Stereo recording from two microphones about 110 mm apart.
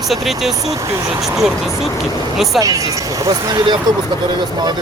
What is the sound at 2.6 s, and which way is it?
Speech, 30° right (ahead or behind).